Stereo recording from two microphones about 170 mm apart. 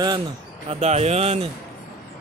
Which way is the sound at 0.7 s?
40° right (ahead or behind).